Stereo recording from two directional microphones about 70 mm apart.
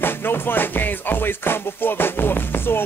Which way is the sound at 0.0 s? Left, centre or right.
Left.